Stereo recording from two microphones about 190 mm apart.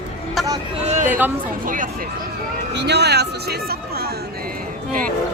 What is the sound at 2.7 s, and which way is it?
Speech, 60° right (ahead or behind).